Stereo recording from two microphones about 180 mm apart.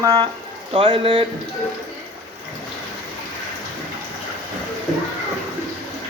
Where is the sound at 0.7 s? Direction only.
30° right (ahead or behind).